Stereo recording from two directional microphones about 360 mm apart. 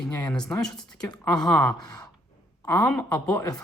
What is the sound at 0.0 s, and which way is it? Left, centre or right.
Speech, centre.